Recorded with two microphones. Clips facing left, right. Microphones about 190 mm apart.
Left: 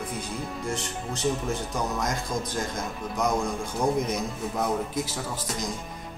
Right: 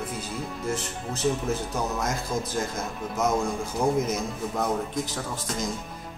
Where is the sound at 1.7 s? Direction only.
5° right (ahead or behind).